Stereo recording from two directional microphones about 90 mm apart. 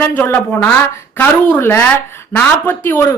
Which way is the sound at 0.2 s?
20° left (ahead or behind).